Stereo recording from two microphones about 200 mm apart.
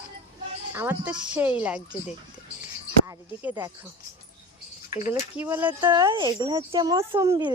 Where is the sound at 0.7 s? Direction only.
10° right (ahead or behind).